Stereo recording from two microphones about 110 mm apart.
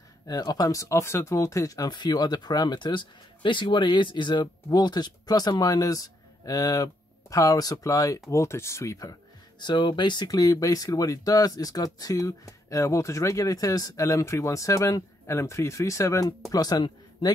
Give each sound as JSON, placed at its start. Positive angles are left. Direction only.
{"t": 0.3, "sound": "speech", "side_deg": 35}
{"t": 9.6, "sound": "speech", "side_deg": 45}